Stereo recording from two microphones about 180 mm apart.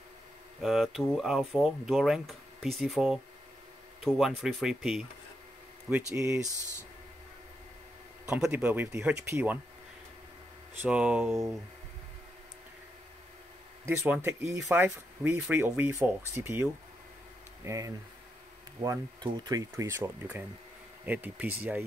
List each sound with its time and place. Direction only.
0.6 s speech: centre (ahead or behind)
6.1 s speech: 15° right (ahead or behind)
8.3 s speech: 5° right (ahead or behind)
10.8 s speech: 5° right (ahead or behind)
13.8 s speech: 10° right (ahead or behind)
17.6 s speech: 20° right (ahead or behind)